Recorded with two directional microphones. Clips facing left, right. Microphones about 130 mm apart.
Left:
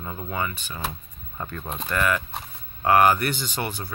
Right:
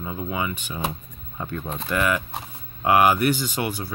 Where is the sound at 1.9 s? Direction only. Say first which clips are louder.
Right 1 dB; 10° right (ahead or behind).